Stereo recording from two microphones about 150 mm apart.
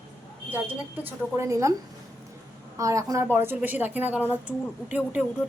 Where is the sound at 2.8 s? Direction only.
20° right (ahead or behind).